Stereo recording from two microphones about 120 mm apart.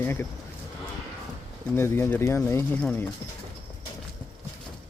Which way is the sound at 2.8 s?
10° left (ahead or behind).